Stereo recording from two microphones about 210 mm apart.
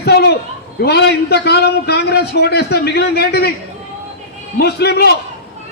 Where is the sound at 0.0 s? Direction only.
50° left (ahead or behind).